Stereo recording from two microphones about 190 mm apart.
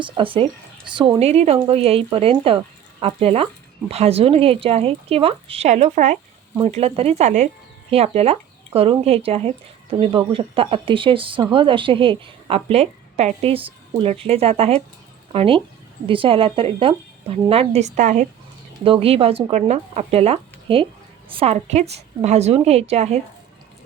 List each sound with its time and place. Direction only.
0.0 s a woman's voice: 25° right (ahead or behind)